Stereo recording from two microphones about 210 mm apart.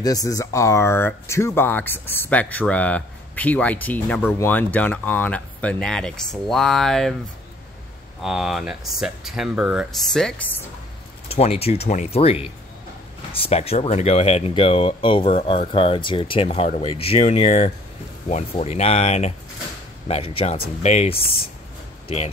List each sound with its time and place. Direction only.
0.0 s speech: 15° left (ahead or behind)
8.2 s speech: centre (ahead or behind)
11.2 s speech: 30° left (ahead or behind)